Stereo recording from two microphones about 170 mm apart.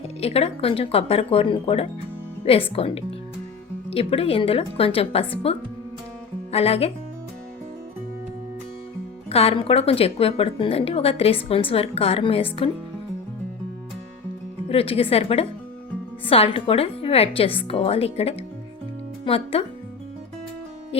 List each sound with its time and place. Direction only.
0.2 s a woman's voice: 35° left (ahead or behind)
9.3 s a woman's voice: 35° left (ahead or behind)
14.7 s a woman's voice: 35° left (ahead or behind)
20.9 s a woman's voice: 35° left (ahead or behind)